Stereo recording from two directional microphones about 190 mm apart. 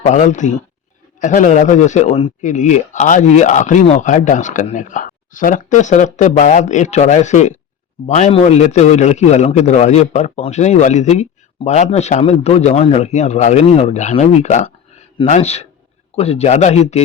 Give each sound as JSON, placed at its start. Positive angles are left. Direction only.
{"t": 0.0, "sound": "a man's voice", "side_deg": 40}